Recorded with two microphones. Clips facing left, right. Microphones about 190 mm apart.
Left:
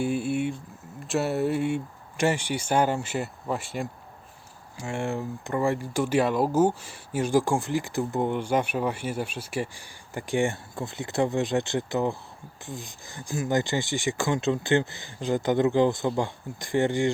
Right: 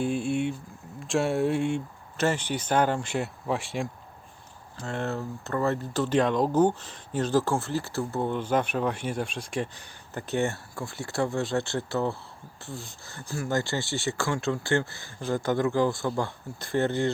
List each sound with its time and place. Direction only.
0.0 s a sound: 5° left (ahead or behind)
0.9 s speech: centre (ahead or behind)
4.8 s speech: 10° left (ahead or behind)